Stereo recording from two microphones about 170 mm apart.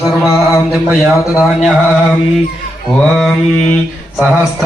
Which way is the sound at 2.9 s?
Centre (ahead or behind).